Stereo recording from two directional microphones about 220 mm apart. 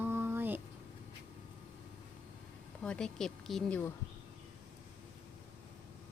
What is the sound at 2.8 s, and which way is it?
Speech, 5° left (ahead or behind).